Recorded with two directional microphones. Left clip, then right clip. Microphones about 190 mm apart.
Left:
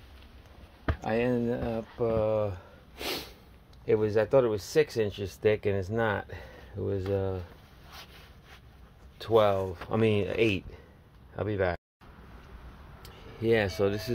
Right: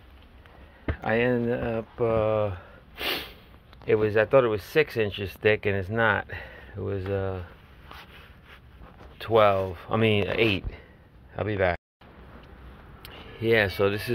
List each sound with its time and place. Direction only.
0.8 s speech: 10° left (ahead or behind)
7.1 s speech: 25° left (ahead or behind)
7.9 s a sound: 75° left (ahead or behind)
9.2 s speech: 10° left (ahead or behind)
13.0 s speech: 15° left (ahead or behind)